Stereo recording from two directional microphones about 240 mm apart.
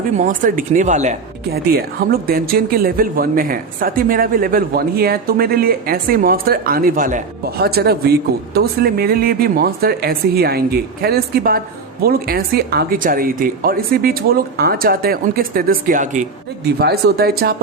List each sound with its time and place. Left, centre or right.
0.2 s speech: right